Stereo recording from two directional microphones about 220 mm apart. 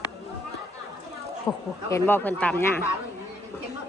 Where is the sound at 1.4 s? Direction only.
10° left (ahead or behind).